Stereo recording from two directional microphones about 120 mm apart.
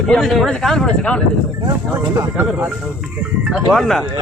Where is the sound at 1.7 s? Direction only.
30° right (ahead or behind).